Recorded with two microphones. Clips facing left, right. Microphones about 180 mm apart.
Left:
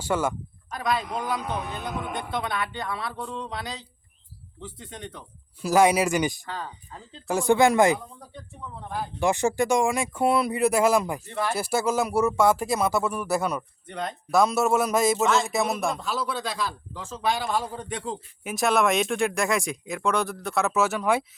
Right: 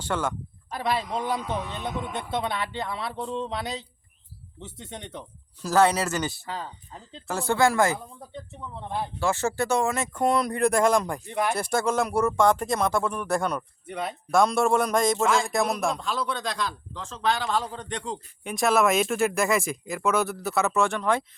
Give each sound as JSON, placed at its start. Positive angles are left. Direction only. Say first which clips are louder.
{"t": 0.0, "sound": "speech", "louder": "left 3 dB", "side_deg": 10}
{"t": 0.7, "sound": "a man's voice", "louder": "even", "side_deg": -30}
{"t": 5.6, "sound": "speech", "louder": "left 2 dB", "side_deg": 10}
{"t": 8.8, "sound": "a man's voice", "louder": "right 1 dB", "side_deg": -25}
{"t": 9.1, "sound": "speech", "louder": "left 4 dB", "side_deg": 15}
{"t": 11.3, "sound": "speech", "louder": "right 2 dB", "side_deg": -15}
{"t": 11.5, "sound": "speech", "louder": "left 2 dB", "side_deg": 5}
{"t": 13.8, "sound": "speech", "louder": "right 1 dB", "side_deg": -5}